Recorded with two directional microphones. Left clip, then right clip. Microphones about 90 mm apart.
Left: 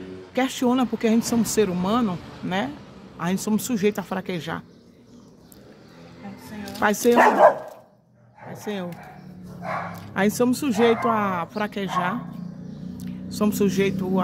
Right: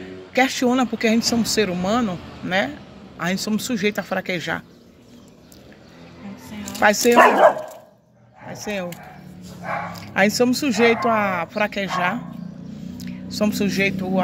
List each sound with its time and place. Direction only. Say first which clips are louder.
0.0 s a sound: right 6 dB; 25° left (ahead or behind)
0.9 s speech: right 3 dB; 30° left (ahead or behind)
6.8 s speech: right 4 dB; 30° left (ahead or behind)
7.2 s speech: right 3 dB; 90° right
8.5 s speech: right 4 dB; 30° left (ahead or behind)